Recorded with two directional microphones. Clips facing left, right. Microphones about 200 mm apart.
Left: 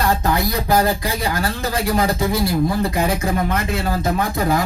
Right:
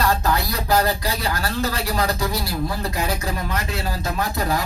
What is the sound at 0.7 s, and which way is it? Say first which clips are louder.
A man's voice: left 1 dB; 50° left (ahead or behind).